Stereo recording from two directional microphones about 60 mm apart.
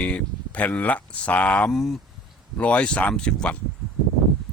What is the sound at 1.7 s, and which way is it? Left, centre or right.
Speech, centre.